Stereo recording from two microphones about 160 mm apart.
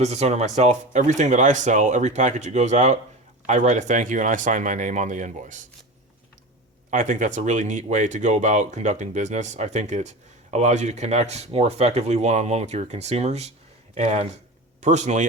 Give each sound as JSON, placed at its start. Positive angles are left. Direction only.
{"t": 0.0, "sound": "speech", "side_deg": -45}
{"t": 6.9, "sound": "speech", "side_deg": -55}